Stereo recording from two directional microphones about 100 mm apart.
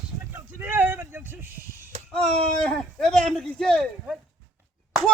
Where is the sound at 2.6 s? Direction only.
5° left (ahead or behind).